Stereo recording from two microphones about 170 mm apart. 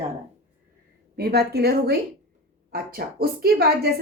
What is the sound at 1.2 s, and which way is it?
A woman's voice, 70° right (ahead or behind).